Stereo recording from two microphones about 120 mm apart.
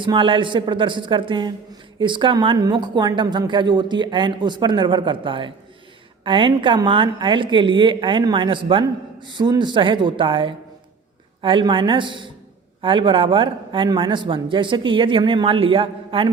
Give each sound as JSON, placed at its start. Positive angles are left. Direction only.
{"t": 0.0, "sound": "a man's voice", "side_deg": -45}